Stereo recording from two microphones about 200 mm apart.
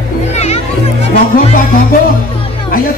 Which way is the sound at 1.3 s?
45° left (ahead or behind).